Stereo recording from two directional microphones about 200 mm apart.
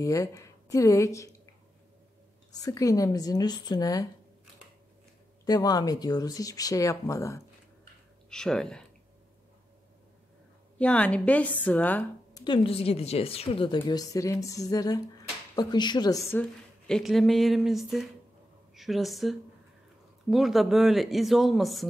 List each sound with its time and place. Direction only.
0.0 s speech: 15° left (ahead or behind)
2.5 s speech: 15° left (ahead or behind)
5.4 s speech: 20° left (ahead or behind)
8.3 s a woman's voice: 5° left (ahead or behind)
10.8 s speech: 5° left (ahead or behind)
12.4 s speech: 25° left (ahead or behind)
13.7 s a woman's voice: 15° left (ahead or behind); by 21.8 s centre (ahead or behind)